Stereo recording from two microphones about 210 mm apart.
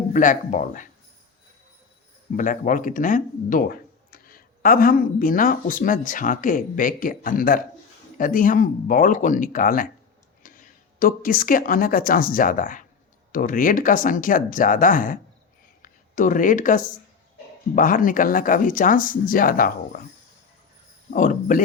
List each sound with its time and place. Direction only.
0.1 s speech: 40° left (ahead or behind)
2.3 s speech: 40° left (ahead or behind)
21.1 s speech: 40° left (ahead or behind)